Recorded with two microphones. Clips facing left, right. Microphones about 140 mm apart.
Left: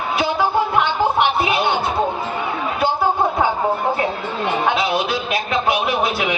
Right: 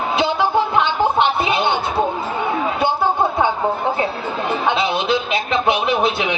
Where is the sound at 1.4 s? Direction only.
25° right (ahead or behind).